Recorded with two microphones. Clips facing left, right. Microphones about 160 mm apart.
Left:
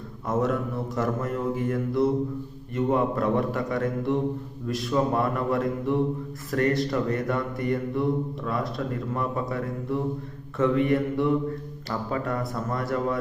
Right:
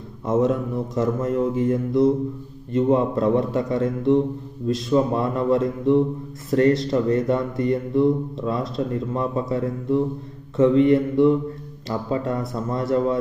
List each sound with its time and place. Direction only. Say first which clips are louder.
0.3 s speech: right 5 dB; 20° right (ahead or behind)